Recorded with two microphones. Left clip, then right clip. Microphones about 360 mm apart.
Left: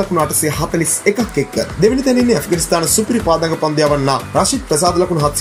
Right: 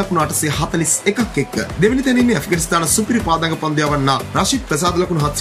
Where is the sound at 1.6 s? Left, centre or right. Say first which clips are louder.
Left 3 dB; centre.